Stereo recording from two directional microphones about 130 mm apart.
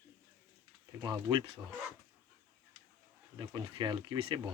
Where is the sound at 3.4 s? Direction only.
35° right (ahead or behind).